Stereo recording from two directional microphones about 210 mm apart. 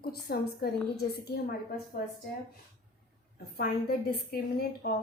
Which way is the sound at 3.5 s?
45° left (ahead or behind).